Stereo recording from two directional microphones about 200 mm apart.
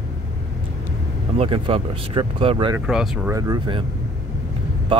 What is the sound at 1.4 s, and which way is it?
Speech, 30° right (ahead or behind).